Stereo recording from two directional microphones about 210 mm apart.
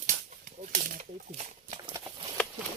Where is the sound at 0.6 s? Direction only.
35° right (ahead or behind).